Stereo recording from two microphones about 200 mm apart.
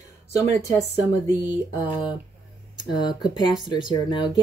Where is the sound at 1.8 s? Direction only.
20° left (ahead or behind).